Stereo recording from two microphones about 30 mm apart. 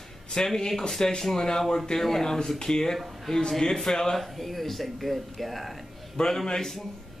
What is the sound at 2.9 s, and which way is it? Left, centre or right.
A woman's voice, centre.